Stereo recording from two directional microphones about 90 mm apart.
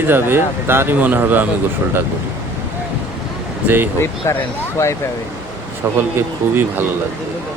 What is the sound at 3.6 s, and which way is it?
Speech, 20° right (ahead or behind).